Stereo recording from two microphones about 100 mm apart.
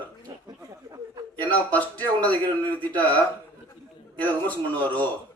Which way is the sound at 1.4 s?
15° left (ahead or behind).